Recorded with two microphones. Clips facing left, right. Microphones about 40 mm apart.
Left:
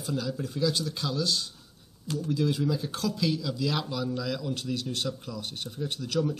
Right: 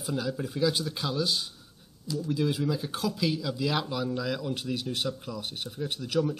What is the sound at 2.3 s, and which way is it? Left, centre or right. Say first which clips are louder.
Speech: left 1 dB; centre.